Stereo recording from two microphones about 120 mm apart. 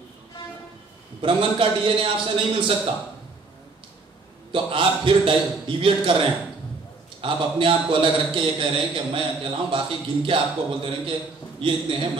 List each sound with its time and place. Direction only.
1.2 s a man's voice: 45° right (ahead or behind)
4.5 s a man's voice: 45° right (ahead or behind)